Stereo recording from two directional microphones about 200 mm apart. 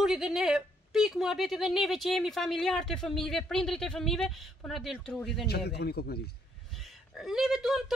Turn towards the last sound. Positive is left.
turn(degrees=0)  # may be behind; listen again after turning